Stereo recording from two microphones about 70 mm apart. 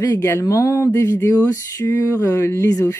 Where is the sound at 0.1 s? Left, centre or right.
Left.